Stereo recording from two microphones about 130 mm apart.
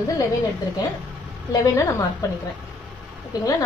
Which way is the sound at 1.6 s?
25° left (ahead or behind).